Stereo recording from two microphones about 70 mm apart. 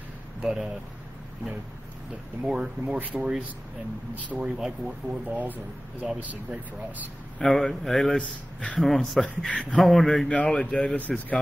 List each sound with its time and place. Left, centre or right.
0.4 s speech: centre
2.4 s speech: centre
2.9 s speech: centre
5.2 s speech: right
7.3 s speech: centre
8.2 s speech: centre
8.7 s speech: centre
9.2 s speech: centre
9.8 s speech: centre